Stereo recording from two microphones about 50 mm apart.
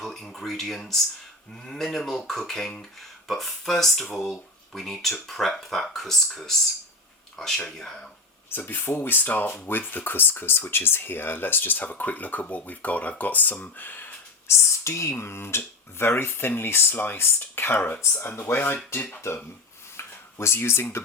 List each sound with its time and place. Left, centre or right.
0.0 s speech: centre
8.4 s speech: left
14.4 s speech: left
15.2 s speech: left
18.0 s speech: left
19.3 s speech: left
20.0 s a sound: left